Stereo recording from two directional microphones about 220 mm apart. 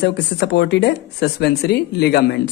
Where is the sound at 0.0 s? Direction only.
50° left (ahead or behind).